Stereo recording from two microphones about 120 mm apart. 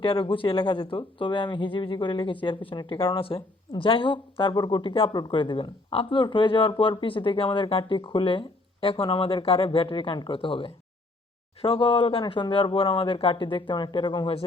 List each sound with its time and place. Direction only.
0.0 s speech: 45° left (ahead or behind)
3.2 s speech: 50° left (ahead or behind)